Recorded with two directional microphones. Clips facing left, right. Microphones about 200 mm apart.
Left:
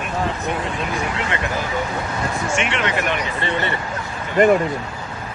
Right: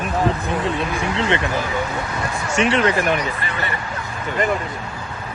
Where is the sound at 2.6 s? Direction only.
35° right (ahead or behind).